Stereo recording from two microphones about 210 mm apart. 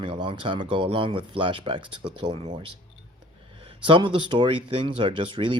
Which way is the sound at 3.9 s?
25° right (ahead or behind).